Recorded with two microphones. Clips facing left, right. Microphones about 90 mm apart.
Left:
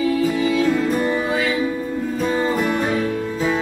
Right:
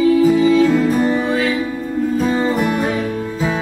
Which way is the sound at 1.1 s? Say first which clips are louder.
Right 3 dB; 5° left (ahead or behind).